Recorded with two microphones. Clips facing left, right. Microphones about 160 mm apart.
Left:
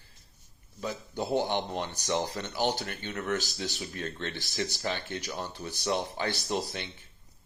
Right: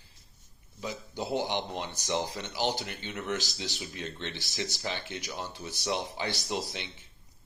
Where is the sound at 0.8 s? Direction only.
10° right (ahead or behind).